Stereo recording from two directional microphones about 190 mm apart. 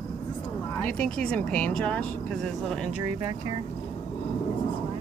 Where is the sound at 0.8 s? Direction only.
5° left (ahead or behind).